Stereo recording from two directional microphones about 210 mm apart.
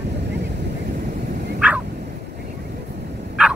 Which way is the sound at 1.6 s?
5° right (ahead or behind).